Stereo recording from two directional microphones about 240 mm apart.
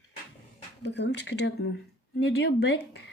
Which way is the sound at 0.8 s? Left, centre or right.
Left.